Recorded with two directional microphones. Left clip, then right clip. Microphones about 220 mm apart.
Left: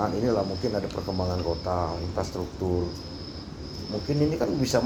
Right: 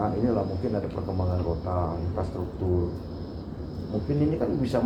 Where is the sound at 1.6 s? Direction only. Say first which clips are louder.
Left 2 dB; 30° left (ahead or behind).